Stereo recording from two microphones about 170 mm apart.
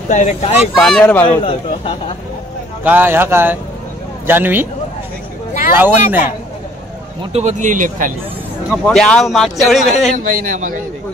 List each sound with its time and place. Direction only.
0.1 s speech: 40° left (ahead or behind)
0.7 s speech: 5° left (ahead or behind)
1.2 s speech: 35° left (ahead or behind)
2.8 s speech: 10° right (ahead or behind)
5.8 s speech: 10° right (ahead or behind)
7.3 s speech: 45° right (ahead or behind)
8.6 s speech: 5° left (ahead or behind)
10.1 s speech: 55° right (ahead or behind)